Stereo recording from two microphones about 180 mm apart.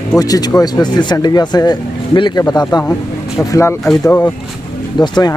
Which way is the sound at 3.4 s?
10° left (ahead or behind).